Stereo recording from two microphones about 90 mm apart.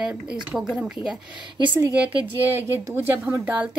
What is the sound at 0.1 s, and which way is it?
Speech, 20° right (ahead or behind).